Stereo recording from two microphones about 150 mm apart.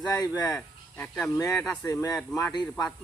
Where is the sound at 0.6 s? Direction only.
10° left (ahead or behind).